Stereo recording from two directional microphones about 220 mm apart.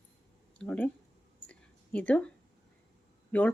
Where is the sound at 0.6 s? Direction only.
5° left (ahead or behind).